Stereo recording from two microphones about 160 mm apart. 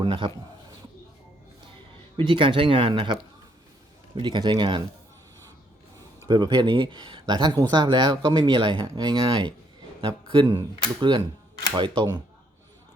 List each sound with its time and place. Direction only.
0.0 s a man's voice: 30° right (ahead or behind)
2.1 s speech: 30° right (ahead or behind)
4.2 s speech: 30° right (ahead or behind)
6.1 s speech: 25° right (ahead or behind)